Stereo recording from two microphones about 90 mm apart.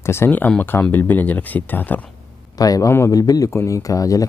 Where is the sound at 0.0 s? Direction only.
30° left (ahead or behind).